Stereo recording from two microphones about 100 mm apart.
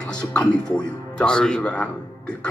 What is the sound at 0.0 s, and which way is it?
Speech, 10° left (ahead or behind).